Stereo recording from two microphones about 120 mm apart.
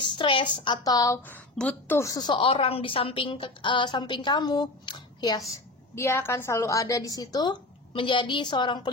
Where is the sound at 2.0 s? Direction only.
30° left (ahead or behind).